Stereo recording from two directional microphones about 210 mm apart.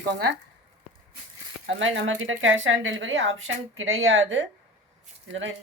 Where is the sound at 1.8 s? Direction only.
65° right (ahead or behind).